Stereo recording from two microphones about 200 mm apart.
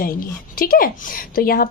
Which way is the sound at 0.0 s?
45° left (ahead or behind).